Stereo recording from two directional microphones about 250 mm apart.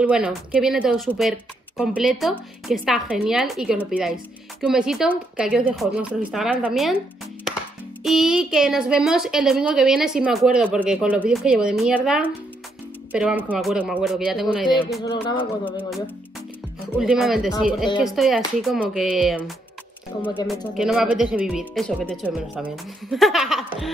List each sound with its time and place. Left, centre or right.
0.0 s a woman's voice: centre
8.0 s a woman's voice: centre
15.3 s speech: centre
16.9 s a woman's voice: centre
23.1 s a sound: centre